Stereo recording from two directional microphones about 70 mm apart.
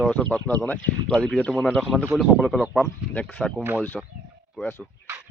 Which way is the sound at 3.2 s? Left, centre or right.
Left.